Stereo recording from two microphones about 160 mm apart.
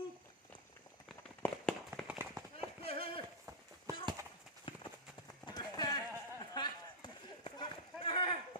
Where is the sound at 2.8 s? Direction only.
35° left (ahead or behind).